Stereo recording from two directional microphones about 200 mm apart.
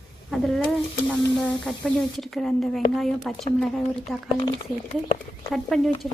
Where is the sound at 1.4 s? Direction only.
Centre (ahead or behind).